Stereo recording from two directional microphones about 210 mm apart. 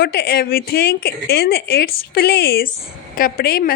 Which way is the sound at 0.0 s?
45° left (ahead or behind).